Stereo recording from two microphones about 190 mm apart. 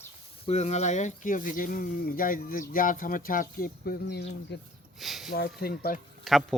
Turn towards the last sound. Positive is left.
turn(degrees=0)  # may be behind; listen again after turning